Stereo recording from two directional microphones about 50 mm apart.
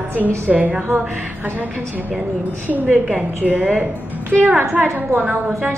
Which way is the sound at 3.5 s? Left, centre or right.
Right.